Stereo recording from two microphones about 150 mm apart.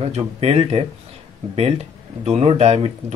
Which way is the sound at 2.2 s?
45° right (ahead or behind).